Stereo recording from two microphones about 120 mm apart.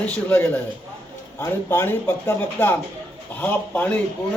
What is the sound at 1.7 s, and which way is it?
Speech, 20° left (ahead or behind).